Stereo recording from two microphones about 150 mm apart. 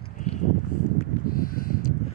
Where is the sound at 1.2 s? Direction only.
75° left (ahead or behind).